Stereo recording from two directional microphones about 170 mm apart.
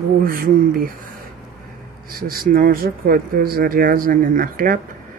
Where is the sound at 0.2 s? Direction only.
60° right (ahead or behind).